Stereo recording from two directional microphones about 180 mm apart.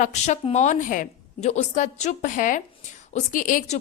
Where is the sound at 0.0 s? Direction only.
40° left (ahead or behind).